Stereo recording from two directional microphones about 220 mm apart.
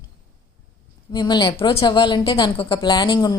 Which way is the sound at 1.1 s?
20° left (ahead or behind).